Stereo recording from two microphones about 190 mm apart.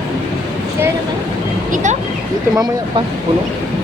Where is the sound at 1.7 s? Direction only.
40° right (ahead or behind).